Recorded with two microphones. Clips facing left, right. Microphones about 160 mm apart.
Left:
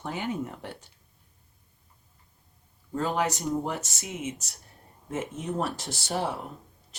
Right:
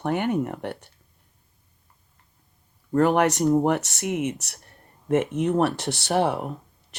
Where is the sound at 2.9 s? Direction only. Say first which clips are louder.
Right 8 dB; 65° right (ahead or behind).